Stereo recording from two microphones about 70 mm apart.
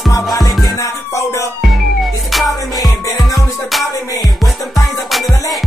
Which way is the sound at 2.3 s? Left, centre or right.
Centre.